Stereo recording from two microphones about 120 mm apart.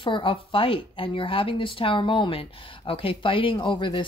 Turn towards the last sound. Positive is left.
turn(degrees=40)  # may be behind; listen again after turning